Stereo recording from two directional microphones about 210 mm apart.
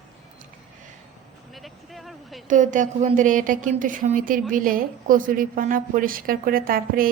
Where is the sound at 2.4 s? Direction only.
35° right (ahead or behind).